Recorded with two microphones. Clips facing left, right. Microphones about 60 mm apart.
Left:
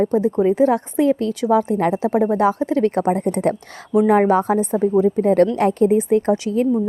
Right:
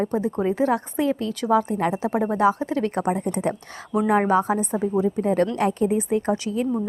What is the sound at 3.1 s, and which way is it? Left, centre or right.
Speech, left.